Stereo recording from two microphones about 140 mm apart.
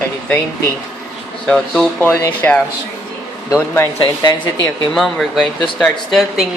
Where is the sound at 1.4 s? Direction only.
Centre (ahead or behind).